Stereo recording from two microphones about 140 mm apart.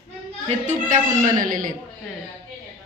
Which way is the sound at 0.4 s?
60° right (ahead or behind).